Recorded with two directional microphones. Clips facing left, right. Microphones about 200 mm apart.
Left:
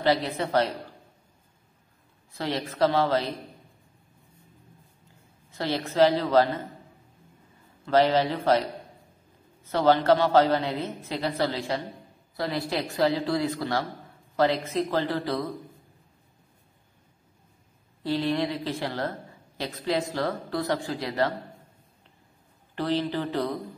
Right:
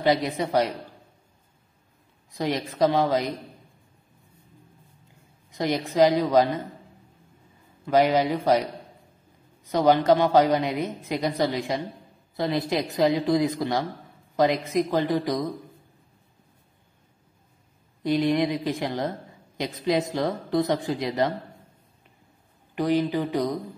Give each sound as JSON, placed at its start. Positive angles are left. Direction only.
{"t": 0.0, "sound": "a woman's voice", "side_deg": -15}
{"t": 2.3, "sound": "a woman's voice", "side_deg": -15}
{"t": 5.5, "sound": "a woman's voice", "side_deg": -15}
{"t": 7.8, "sound": "a woman's voice", "side_deg": -15}
{"t": 9.7, "sound": "a woman's voice", "side_deg": -15}
{"t": 18.0, "sound": "a woman's voice", "side_deg": -15}
{"t": 22.8, "sound": "a woman's voice", "side_deg": -15}